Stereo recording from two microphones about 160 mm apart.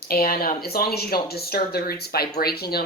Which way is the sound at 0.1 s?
65° left (ahead or behind).